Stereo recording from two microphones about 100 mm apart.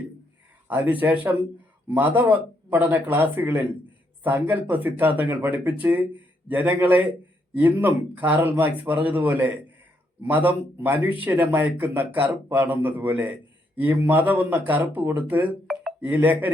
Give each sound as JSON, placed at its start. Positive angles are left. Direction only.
{"t": 0.7, "sound": "speech", "side_deg": -15}